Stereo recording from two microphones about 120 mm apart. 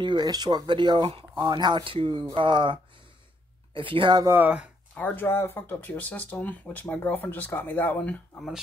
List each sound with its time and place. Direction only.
0.0 s speech: 35° right (ahead or behind)
1.0 s speech: 50° right (ahead or behind)
1.4 s speech: 35° right (ahead or behind)
4.4 s speech: 15° right (ahead or behind)
4.9 s speech: 15° left (ahead or behind)